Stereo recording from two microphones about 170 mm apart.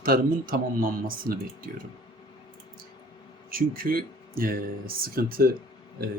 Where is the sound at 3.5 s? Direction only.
60° right (ahead or behind).